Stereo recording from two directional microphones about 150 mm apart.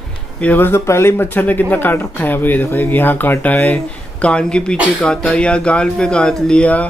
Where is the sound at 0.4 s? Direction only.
10° left (ahead or behind).